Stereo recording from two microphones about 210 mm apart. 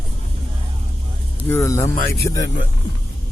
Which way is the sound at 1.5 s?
10° left (ahead or behind).